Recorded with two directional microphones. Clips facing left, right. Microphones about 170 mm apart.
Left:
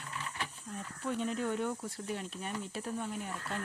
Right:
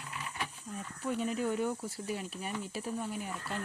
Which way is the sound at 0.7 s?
5° right (ahead or behind).